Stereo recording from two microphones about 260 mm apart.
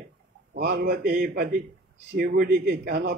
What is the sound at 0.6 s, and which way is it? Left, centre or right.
A man's voice, right.